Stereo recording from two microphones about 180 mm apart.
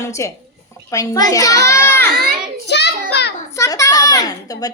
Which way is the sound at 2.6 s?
70° left (ahead or behind).